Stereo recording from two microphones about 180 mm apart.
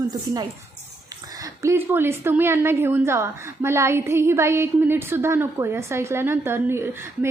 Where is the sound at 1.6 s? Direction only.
10° right (ahead or behind).